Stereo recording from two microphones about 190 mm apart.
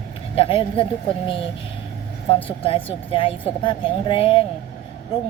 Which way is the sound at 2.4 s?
30° left (ahead or behind).